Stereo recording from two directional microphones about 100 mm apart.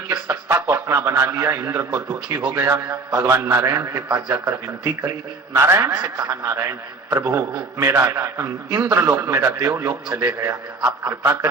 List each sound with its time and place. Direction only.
0.3 s a man's voice: 30° right (ahead or behind)
11.1 s a man's voice: 25° right (ahead or behind)